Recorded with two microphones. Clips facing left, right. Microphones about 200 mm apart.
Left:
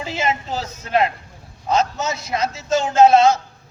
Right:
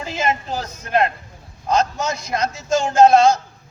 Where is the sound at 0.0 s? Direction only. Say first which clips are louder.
Even; 5° left (ahead or behind).